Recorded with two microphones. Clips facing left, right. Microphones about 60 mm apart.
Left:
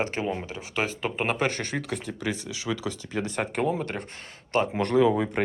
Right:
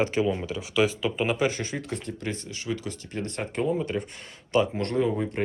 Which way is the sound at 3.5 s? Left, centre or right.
Left.